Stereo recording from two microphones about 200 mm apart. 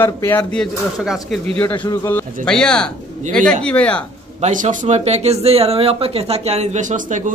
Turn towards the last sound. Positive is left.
turn(degrees=-40)  # may be behind; listen again after turning